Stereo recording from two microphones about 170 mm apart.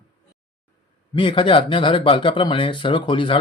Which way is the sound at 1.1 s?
30° left (ahead or behind).